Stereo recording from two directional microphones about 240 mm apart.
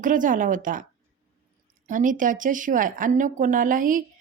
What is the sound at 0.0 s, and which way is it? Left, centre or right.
Speech, right.